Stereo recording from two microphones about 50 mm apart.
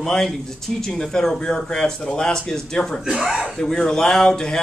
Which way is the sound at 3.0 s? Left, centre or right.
Centre.